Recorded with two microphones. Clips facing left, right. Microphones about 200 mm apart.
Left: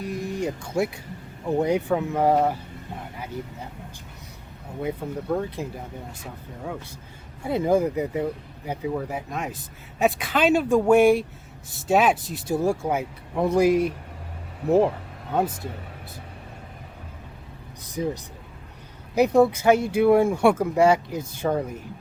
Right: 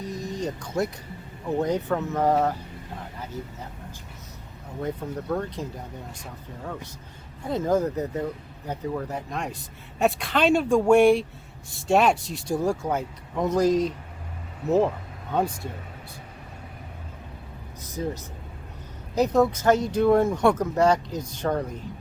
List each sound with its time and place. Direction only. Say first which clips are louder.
0.0 s a sound: left 3 dB; 10° left (ahead or behind)
1.5 s speech: left 3 dB; 10° left (ahead or behind)
4.8 s speech: left 1 dB; 10° left (ahead or behind)
7.4 s speech: left 2 dB; 10° left (ahead or behind)
17.8 s speech: left 3 dB; 15° left (ahead or behind)